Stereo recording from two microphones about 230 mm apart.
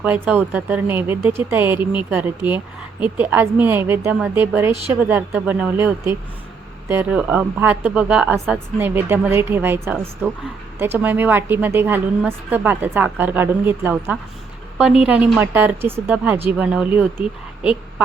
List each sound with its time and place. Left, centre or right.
0.0 s a woman's voice: centre